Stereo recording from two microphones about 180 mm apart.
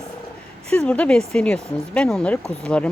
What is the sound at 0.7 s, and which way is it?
Speech, 5° left (ahead or behind).